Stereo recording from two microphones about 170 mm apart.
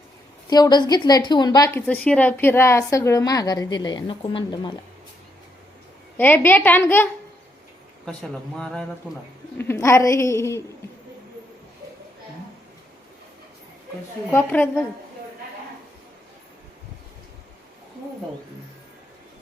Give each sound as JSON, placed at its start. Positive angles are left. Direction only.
{"t": 0.5, "sound": "a woman's voice", "side_deg": 25}
{"t": 6.1, "sound": "a woman's voice", "side_deg": 10}
{"t": 9.6, "sound": "a woman's voice", "side_deg": 15}
{"t": 14.3, "sound": "a woman's voice", "side_deg": 10}